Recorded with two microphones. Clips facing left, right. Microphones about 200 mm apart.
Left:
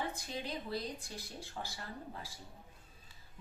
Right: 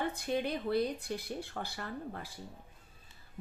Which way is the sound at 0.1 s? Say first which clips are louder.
Right 8 dB; 60° right (ahead or behind).